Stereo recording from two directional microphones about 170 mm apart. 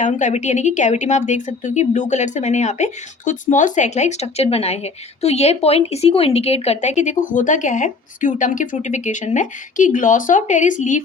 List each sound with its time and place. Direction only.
0.0 s a woman's voice: 45° left (ahead or behind)